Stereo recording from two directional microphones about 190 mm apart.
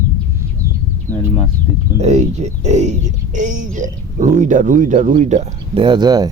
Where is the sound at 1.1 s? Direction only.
10° left (ahead or behind).